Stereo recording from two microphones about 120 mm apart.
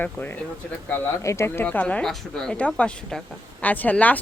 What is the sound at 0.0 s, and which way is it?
Speech, 15° left (ahead or behind).